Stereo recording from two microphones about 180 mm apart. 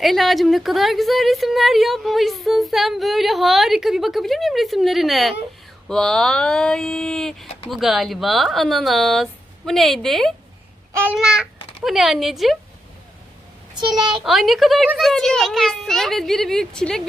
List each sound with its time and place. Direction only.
0.0 s a woman's voice: centre (ahead or behind)
13.7 s a child's voice: 25° right (ahead or behind)
14.3 s a woman's voice: centre (ahead or behind)